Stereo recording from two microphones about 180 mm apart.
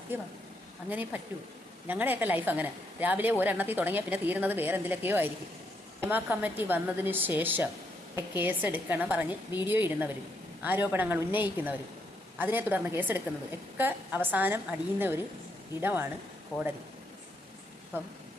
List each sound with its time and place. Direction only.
0.1 s a woman's voice: 10° right (ahead or behind)
16.5 s speech: 20° left (ahead or behind)
17.9 s a woman's voice: 10° right (ahead or behind)